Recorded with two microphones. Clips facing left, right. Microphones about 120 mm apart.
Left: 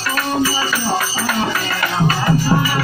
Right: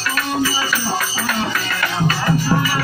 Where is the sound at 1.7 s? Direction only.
20° left (ahead or behind).